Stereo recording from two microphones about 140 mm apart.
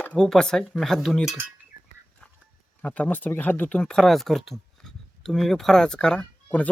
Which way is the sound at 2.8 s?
10° left (ahead or behind).